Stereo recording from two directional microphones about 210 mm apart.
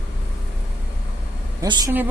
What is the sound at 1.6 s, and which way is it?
Speech, 15° right (ahead or behind).